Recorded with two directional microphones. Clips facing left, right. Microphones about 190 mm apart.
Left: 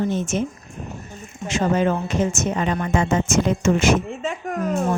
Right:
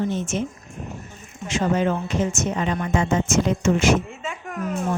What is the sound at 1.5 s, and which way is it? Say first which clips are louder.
A woman's voice: left 2 dB; 50° left (ahead or behind).